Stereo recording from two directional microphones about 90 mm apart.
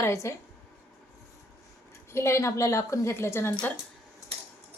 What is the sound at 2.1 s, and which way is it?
A woman's voice, 30° left (ahead or behind).